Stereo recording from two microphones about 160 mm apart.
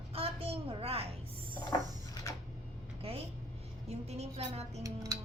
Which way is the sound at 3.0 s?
35° right (ahead or behind).